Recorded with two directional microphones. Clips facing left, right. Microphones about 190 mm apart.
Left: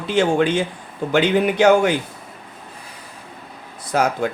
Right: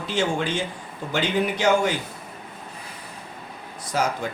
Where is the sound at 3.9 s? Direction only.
60° left (ahead or behind).